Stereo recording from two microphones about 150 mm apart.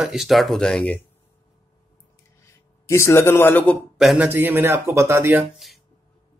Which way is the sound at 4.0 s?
5° right (ahead or behind).